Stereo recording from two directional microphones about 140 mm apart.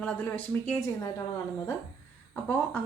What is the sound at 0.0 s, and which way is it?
Speech, 10° left (ahead or behind).